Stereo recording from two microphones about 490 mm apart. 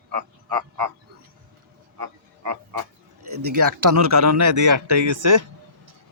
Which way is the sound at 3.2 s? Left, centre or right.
Right.